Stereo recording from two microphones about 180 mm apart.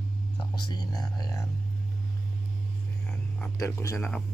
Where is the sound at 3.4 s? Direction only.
15° left (ahead or behind).